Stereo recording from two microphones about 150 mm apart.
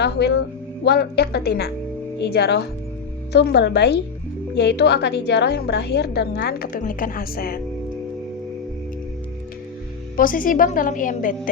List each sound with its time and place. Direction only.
0.0 s a woman's voice: 90° left
10.2 s a woman's voice: 65° left (ahead or behind)